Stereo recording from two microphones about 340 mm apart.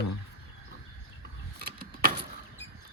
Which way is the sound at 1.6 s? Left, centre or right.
Right.